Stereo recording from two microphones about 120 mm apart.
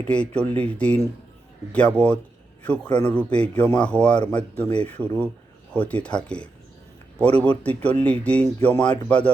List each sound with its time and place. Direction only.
0.1 s a man's voice: 10° left (ahead or behind)